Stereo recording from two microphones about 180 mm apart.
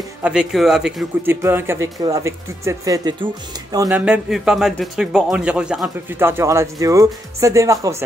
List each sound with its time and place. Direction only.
0.2 s a man's voice: 5° right (ahead or behind); by 3.3 s 20° right (ahead or behind)
3.9 s a man's voice: 5° right (ahead or behind)